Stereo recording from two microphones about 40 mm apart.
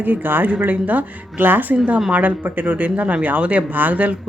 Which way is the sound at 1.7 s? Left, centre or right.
Right.